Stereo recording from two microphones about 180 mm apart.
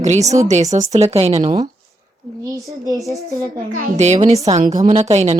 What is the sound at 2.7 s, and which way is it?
Speech, 20° right (ahead or behind).